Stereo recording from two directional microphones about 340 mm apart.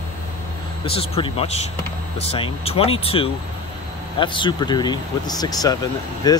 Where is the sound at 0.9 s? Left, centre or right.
Centre.